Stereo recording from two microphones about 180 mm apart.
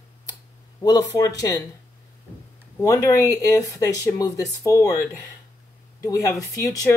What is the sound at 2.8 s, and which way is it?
Speech, 20° left (ahead or behind).